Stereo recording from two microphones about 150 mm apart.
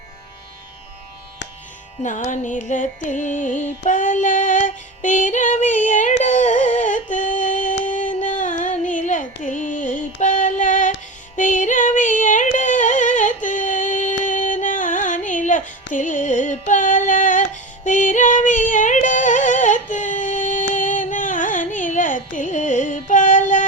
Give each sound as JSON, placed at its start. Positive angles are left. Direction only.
{"t": 2.0, "sound": "music", "side_deg": 55}